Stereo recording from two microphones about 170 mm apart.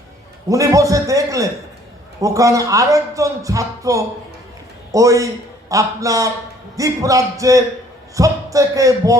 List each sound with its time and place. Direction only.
0.4 s speech: 20° right (ahead or behind)